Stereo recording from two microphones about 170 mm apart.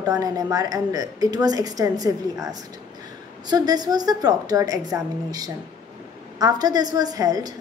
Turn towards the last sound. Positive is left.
turn(degrees=-20)  # may be behind; listen again after turning